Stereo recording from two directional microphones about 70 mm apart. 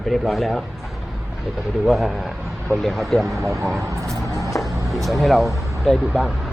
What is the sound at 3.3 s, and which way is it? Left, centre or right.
Speech, right.